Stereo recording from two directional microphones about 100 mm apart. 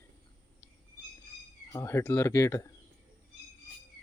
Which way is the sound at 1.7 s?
30° left (ahead or behind).